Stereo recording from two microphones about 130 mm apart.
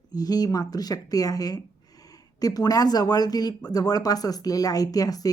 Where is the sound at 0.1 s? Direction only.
30° left (ahead or behind).